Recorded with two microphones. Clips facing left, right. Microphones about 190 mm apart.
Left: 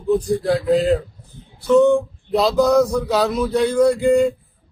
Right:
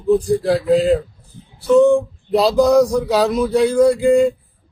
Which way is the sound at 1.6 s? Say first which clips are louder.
Right 2 dB; 10° right (ahead or behind).